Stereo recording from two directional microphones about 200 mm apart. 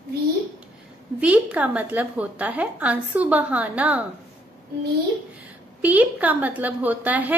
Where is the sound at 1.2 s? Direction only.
5° right (ahead or behind).